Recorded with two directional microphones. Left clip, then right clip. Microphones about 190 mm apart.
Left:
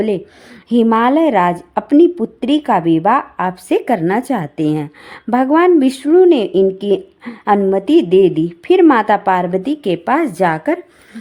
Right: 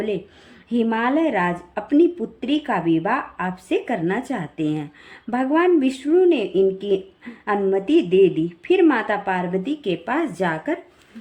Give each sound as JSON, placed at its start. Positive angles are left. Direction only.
{"t": 0.7, "sound": "a woman's voice", "side_deg": 45}